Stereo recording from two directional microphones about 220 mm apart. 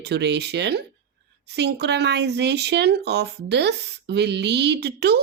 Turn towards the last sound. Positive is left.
turn(degrees=-50)  # may be behind; listen again after turning